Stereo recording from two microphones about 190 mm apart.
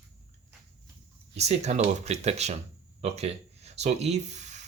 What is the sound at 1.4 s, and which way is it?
Speech, 35° right (ahead or behind).